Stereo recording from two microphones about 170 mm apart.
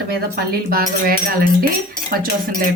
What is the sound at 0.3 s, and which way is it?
Speech, 60° right (ahead or behind).